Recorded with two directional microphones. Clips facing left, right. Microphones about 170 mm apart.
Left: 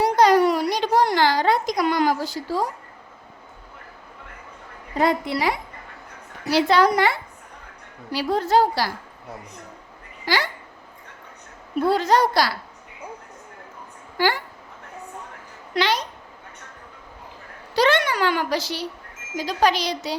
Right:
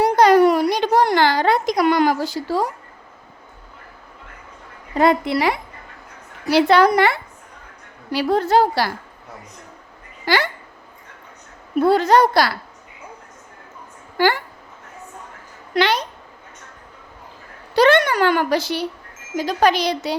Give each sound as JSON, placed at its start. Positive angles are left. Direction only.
{"t": 0.0, "sound": "a sound", "side_deg": -55}
{"t": 4.9, "sound": "a woman's voice", "side_deg": -70}
{"t": 10.2, "sound": "a woman's voice", "side_deg": -60}
{"t": 11.8, "sound": "a woman's voice", "side_deg": -60}
{"t": 14.2, "sound": "a woman's voice", "side_deg": -55}
{"t": 15.7, "sound": "a woman's voice", "side_deg": -60}
{"t": 17.7, "sound": "a woman's voice", "side_deg": -55}